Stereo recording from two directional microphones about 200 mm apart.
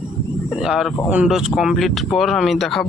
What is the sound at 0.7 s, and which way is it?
Speech, 5° right (ahead or behind).